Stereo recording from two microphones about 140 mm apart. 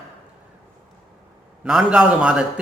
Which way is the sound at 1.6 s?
5° right (ahead or behind).